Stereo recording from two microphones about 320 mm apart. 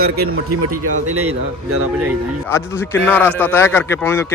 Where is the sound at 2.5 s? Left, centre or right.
Centre.